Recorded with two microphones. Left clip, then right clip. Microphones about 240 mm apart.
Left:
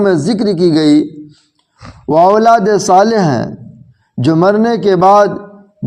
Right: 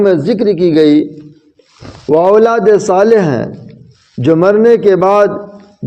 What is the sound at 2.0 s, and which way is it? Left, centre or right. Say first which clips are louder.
Speech: even; left.